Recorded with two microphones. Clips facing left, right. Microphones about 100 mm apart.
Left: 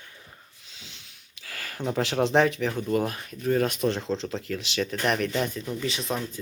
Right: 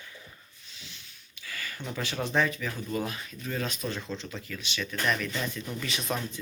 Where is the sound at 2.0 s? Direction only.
90° left; by 2.8 s 70° left (ahead or behind).